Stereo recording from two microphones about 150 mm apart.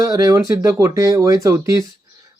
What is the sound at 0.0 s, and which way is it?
Speech, 20° right (ahead or behind).